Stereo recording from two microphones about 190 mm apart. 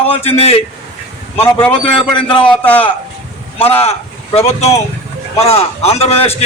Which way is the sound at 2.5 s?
10° left (ahead or behind).